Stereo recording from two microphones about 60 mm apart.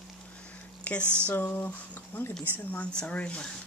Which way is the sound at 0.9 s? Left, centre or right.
Left.